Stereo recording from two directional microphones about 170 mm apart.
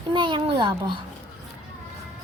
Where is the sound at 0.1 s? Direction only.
25° right (ahead or behind).